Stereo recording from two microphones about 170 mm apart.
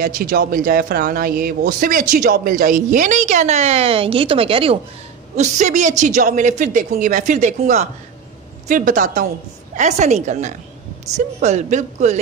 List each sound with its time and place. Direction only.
0.0 s a man's voice: 55° right (ahead or behind); by 4.7 s 35° right (ahead or behind)
5.3 s a man's voice: 45° right (ahead or behind)